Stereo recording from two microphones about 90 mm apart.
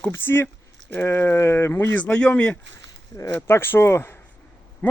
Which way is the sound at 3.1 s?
30° left (ahead or behind).